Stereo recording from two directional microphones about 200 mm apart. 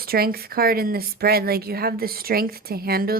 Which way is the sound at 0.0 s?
50° right (ahead or behind).